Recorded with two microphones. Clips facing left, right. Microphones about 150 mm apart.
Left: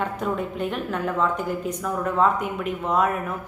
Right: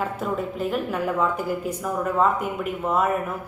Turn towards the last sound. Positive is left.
turn(degrees=-5)  # may be behind; listen again after turning